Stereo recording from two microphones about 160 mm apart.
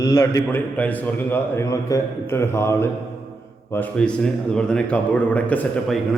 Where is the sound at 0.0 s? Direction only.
20° left (ahead or behind).